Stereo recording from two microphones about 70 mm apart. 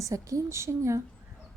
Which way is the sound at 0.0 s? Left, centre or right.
Right.